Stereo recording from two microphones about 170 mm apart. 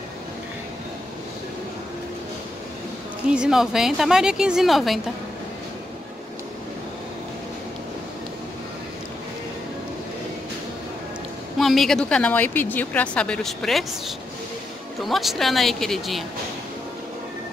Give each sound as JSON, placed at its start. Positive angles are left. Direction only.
{"t": 3.3, "sound": "a woman's voice", "side_deg": -5}
{"t": 11.5, "sound": "a woman's voice", "side_deg": 0}